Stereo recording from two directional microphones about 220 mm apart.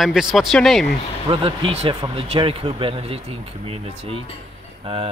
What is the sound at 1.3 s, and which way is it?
Speech, 25° right (ahead or behind).